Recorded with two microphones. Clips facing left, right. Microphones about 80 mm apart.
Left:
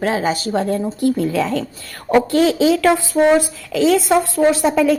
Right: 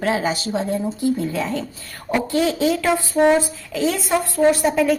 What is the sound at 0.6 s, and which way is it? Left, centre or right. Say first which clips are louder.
A woman's voice: left 4 dB; left.